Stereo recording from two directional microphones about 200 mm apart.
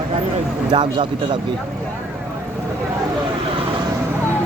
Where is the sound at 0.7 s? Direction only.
25° right (ahead or behind).